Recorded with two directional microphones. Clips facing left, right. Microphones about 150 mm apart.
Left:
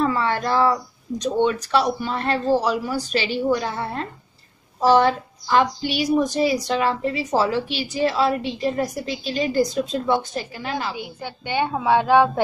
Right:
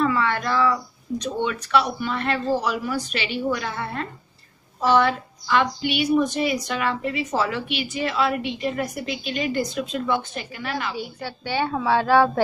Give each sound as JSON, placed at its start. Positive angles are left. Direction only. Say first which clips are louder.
{"t": 0.0, "sound": "a sound", "louder": "left 1 dB", "side_deg": 35}
{"t": 1.2, "sound": "a woman's voice", "louder": "left 7 dB", "side_deg": 35}
{"t": 11.0, "sound": "a woman's voice", "louder": "right 1 dB", "side_deg": 20}